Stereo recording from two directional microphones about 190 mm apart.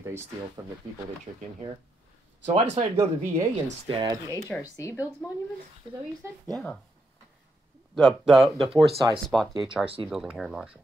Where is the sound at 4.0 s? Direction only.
20° right (ahead or behind).